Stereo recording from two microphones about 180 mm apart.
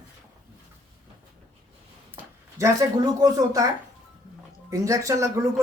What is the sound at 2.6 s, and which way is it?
A woman's voice, 20° right (ahead or behind).